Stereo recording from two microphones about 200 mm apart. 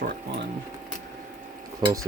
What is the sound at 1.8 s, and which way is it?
Cutlery, 20° right (ahead or behind).